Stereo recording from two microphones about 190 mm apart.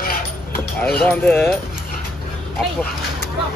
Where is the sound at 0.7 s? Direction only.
5° left (ahead or behind).